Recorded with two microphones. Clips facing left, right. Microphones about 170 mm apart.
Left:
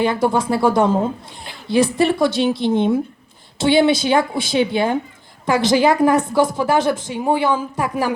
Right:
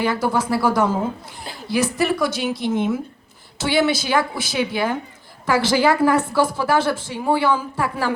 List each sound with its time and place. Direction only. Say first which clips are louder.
0.0 s a woman's voice: left 3 dB; 25° left (ahead or behind)